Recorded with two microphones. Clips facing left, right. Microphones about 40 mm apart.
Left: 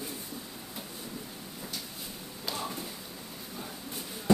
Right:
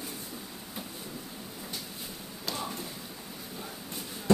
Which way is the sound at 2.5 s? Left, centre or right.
Centre.